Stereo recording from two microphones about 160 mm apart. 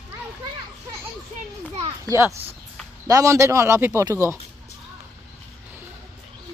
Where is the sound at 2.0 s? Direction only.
20° right (ahead or behind).